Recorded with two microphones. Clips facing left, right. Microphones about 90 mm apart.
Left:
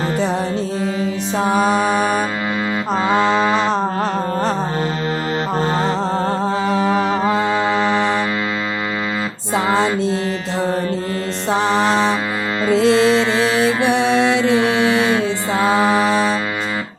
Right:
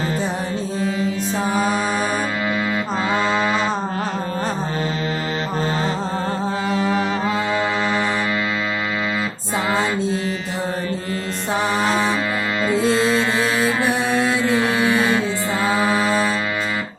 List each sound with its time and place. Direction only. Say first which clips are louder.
1.4 s mantra: left 6 dB; 75° left (ahead or behind)
5.8 s music: left 4 dB; 65° left (ahead or behind); by 7.3 s 45° left (ahead or behind)
7.5 s mantra: left 3 dB; 25° left (ahead or behind)
7.9 s music: left 4 dB; 65° left (ahead or behind)
9.6 s music: left 3 dB; 70° left (ahead or behind)
11.5 s music: left 4 dB; 90° left
14.9 s mantra: left 2 dB; 70° left (ahead or behind)